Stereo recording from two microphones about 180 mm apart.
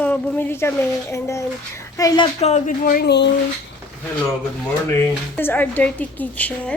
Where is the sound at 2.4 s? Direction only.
40° left (ahead or behind).